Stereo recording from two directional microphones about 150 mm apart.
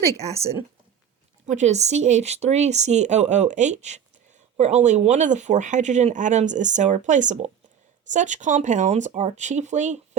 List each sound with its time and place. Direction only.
0.0 s speech: 20° right (ahead or behind)
1.5 s speech: 50° right (ahead or behind)